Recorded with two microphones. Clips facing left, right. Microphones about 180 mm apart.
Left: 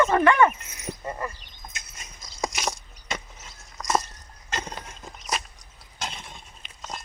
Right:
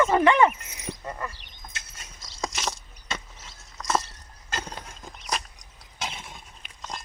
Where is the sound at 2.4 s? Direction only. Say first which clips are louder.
Left 2 dB; 15° left (ahead or behind).